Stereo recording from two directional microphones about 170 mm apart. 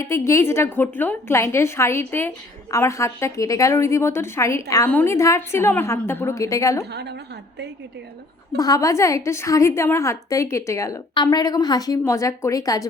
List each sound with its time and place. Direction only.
0.0 s a woman's voice: 15° left (ahead or behind)
8.5 s a woman's voice: 20° left (ahead or behind)